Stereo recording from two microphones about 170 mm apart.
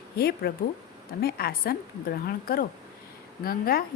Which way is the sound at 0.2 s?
65° left (ahead or behind).